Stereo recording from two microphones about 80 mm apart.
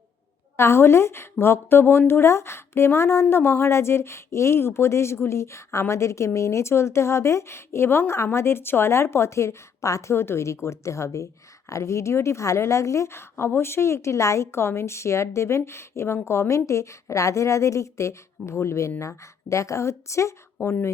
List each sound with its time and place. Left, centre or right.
0.5 s speech: left